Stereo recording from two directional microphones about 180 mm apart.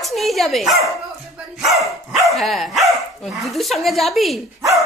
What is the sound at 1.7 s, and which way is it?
Dog, 15° right (ahead or behind).